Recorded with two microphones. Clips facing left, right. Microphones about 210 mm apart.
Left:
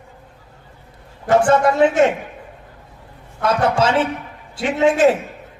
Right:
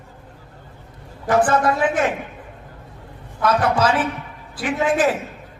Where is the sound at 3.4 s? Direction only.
25° left (ahead or behind).